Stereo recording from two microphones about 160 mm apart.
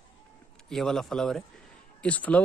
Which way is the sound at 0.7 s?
5° left (ahead or behind).